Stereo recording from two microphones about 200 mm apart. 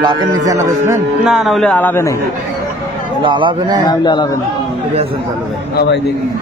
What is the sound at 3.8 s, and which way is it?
Speech, 20° left (ahead or behind).